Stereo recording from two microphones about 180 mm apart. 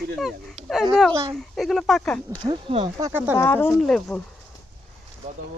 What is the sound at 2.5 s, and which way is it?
Speech, 30° right (ahead or behind).